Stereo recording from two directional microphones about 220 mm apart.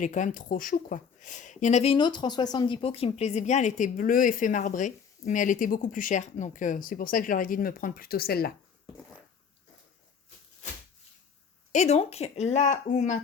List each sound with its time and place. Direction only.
0.0 s speech: 35° left (ahead or behind)
11.7 s speech: 30° left (ahead or behind)